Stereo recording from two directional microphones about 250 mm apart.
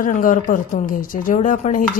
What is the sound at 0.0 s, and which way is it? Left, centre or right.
A woman's voice, left.